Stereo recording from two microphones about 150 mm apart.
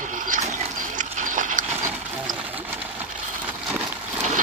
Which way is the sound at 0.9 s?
60° right (ahead or behind).